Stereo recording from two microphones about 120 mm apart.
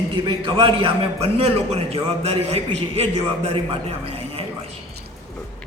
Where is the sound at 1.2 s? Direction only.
55° right (ahead or behind).